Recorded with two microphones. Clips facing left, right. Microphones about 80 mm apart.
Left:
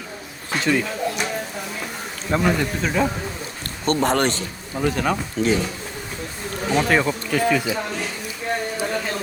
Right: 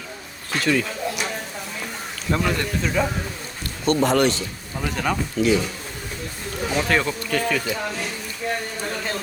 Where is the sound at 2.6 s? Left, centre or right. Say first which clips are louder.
Left 1 dB; centre.